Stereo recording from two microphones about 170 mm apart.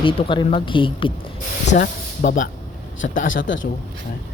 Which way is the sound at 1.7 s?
50° left (ahead or behind).